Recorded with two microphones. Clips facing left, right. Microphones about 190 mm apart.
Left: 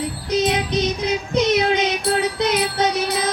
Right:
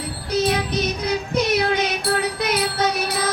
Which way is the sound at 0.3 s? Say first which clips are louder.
Even; 20° left (ahead or behind).